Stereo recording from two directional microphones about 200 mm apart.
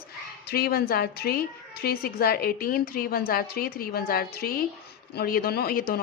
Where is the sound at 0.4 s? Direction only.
50° left (ahead or behind).